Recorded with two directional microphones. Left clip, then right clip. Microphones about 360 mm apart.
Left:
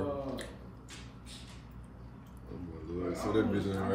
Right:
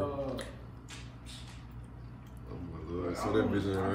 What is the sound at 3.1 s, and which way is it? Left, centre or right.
Speech, centre.